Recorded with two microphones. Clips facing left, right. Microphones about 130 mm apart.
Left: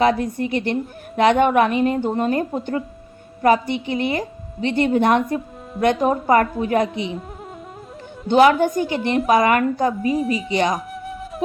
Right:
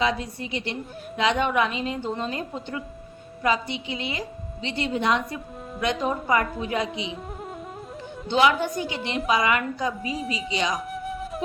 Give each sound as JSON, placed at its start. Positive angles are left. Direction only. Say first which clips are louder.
{"t": 0.0, "sound": "a woman's voice", "louder": "left 8 dB", "side_deg": 50}
{"t": 6.8, "sound": "speech", "louder": "left 6 dB", "side_deg": -15}
{"t": 8.3, "sound": "a woman's voice", "louder": "left 7 dB", "side_deg": 45}
{"t": 10.8, "sound": "flute", "louder": "even", "side_deg": 0}